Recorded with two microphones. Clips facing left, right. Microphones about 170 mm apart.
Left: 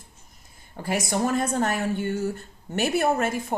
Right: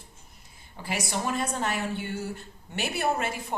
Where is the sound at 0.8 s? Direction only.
45° left (ahead or behind).